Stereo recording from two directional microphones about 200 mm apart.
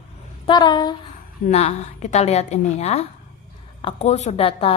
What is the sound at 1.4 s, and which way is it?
A woman's voice, 35° left (ahead or behind).